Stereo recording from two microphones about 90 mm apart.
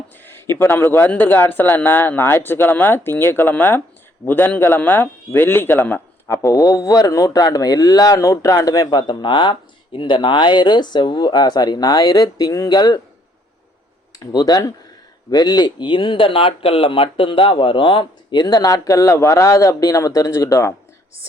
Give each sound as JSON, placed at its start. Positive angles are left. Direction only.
{"t": 0.3, "sound": "a man's voice", "side_deg": 25}
{"t": 6.3, "sound": "speech", "side_deg": 40}
{"t": 14.2, "sound": "speech", "side_deg": 50}